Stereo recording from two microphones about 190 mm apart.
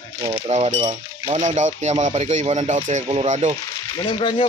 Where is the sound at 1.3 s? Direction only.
40° right (ahead or behind).